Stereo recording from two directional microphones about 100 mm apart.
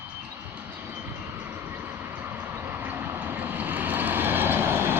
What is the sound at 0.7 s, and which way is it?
Vehicle, 15° right (ahead or behind).